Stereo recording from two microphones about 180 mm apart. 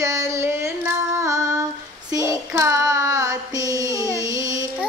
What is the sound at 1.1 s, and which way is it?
Female singing, 15° right (ahead or behind).